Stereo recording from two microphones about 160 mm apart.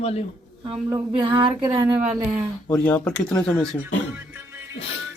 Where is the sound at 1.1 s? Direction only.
35° right (ahead or behind).